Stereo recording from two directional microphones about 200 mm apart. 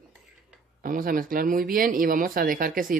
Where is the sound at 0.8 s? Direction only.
45° right (ahead or behind).